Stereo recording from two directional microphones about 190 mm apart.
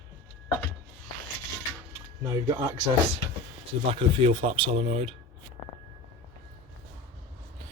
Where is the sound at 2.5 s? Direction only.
20° right (ahead or behind).